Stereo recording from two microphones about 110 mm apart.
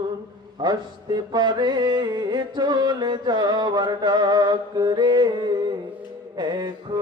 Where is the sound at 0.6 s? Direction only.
40° right (ahead or behind).